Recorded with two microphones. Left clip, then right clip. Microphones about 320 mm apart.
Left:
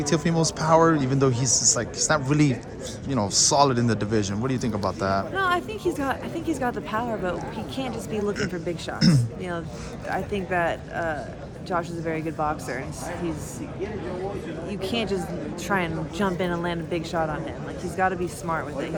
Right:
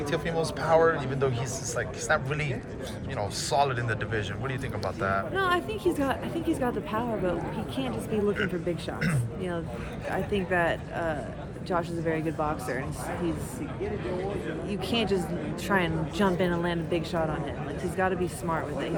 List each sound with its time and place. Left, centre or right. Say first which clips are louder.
0.0 s speech: left 4 dB; left
5.3 s a woman's voice: left 3 dB; centre
9.0 s speech: left 8 dB; centre
10.1 s a woman's voice: left 2 dB; centre
14.7 s a woman's voice: left 1 dB; centre